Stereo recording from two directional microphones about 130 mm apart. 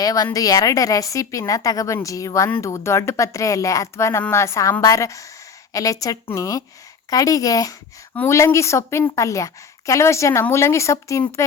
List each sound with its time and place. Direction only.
0.0 s a woman's voice: 25° left (ahead or behind)